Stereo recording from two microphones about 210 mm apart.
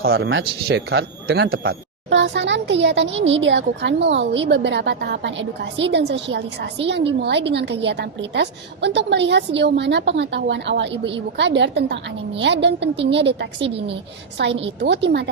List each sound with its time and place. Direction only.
0.1 s a man's voice: 65° right (ahead or behind)
14.8 s a woman's voice: 55° right (ahead or behind)